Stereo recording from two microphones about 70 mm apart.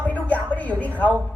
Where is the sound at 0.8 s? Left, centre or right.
Left.